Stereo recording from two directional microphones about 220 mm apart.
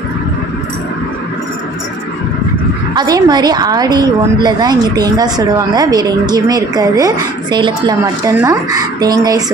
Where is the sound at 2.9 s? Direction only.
20° right (ahead or behind).